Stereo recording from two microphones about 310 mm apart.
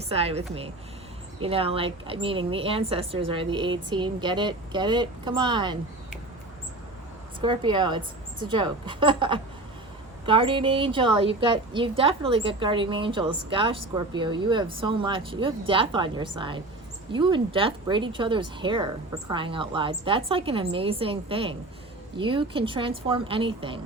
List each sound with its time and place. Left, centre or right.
0.1 s a woman's voice: centre
7.4 s a woman's voice: centre